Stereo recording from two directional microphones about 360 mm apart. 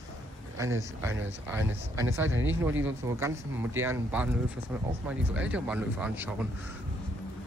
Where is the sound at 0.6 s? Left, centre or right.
Centre.